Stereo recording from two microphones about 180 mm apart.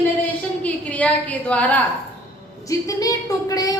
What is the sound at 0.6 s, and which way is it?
A woman's voice, 5° left (ahead or behind).